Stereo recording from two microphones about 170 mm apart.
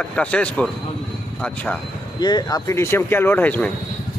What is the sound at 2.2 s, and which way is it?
Speech, 25° left (ahead or behind).